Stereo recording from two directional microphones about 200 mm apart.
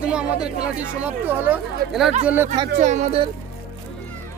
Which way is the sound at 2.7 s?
35° right (ahead or behind).